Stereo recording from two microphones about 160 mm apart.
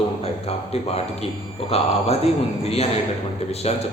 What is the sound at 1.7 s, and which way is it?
Speech, 40° left (ahead or behind).